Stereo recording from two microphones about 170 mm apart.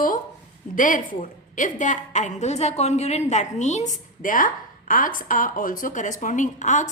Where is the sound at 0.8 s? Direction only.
50° left (ahead or behind).